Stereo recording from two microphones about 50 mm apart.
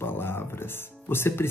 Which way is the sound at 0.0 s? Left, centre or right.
Left.